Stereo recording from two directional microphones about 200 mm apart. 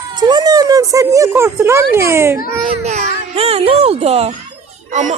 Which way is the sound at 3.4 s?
30° right (ahead or behind).